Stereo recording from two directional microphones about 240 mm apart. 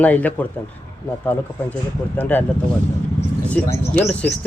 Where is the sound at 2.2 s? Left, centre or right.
Centre.